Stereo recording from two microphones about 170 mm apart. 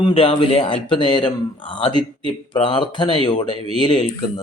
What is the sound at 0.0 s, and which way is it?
Speech, 30° left (ahead or behind).